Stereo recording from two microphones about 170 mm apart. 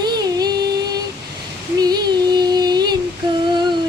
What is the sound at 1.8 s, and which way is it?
Child singing, 25° right (ahead or behind).